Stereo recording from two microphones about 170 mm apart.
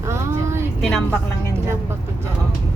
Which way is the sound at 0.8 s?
5° left (ahead or behind).